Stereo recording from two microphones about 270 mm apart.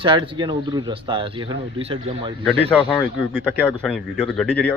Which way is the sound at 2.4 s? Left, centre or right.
Centre.